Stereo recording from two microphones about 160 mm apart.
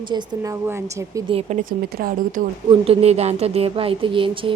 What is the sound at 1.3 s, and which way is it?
Speech, 40° right (ahead or behind).